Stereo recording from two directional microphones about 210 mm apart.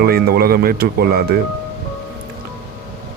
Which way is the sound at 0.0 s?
45° right (ahead or behind).